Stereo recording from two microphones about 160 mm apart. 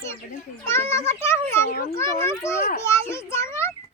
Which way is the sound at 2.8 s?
15° left (ahead or behind).